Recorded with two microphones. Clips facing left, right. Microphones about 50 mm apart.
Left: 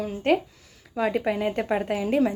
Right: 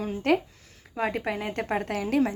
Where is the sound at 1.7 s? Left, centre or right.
Right.